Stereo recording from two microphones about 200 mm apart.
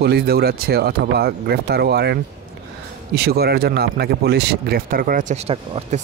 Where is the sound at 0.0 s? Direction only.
50° right (ahead or behind).